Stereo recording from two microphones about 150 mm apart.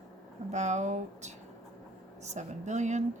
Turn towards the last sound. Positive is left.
turn(degrees=-50)  # may be behind; listen again after turning